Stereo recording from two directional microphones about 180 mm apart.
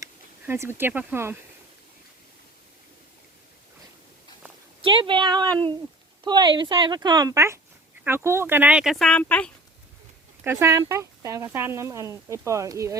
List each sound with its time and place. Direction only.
0.0 s speech: 15° right (ahead or behind)
4.8 s speech: 30° right (ahead or behind); by 9.5 s 5° left (ahead or behind)
10.4 s speech: 15° right (ahead or behind)